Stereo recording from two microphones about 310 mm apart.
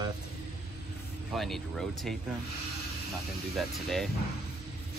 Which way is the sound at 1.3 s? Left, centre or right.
Centre.